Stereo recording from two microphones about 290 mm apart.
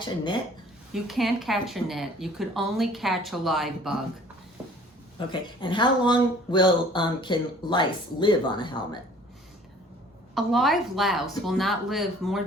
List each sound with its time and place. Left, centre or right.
1.0 s speech: centre
5.3 s speech: centre
10.3 s speech: centre